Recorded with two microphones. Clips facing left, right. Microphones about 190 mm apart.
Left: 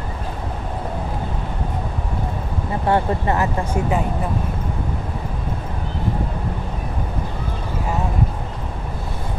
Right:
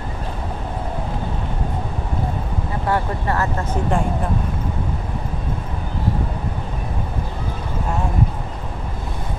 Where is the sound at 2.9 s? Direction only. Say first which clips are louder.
Left 3 dB; 20° left (ahead or behind).